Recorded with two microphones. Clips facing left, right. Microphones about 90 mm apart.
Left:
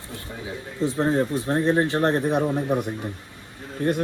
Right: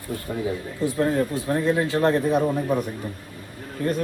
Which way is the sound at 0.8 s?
20° left (ahead or behind).